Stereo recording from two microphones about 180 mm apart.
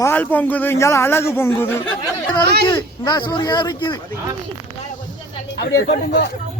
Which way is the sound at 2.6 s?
25° left (ahead or behind).